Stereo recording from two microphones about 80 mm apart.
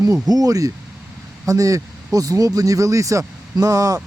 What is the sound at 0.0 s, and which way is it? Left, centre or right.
Speech, right.